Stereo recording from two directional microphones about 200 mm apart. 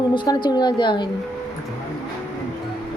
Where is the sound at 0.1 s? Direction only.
25° left (ahead or behind).